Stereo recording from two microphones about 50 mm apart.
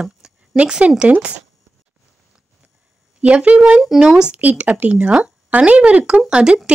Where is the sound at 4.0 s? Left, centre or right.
Centre.